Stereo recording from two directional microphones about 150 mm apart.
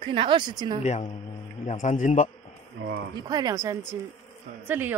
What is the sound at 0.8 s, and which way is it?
Speech, 50° left (ahead or behind).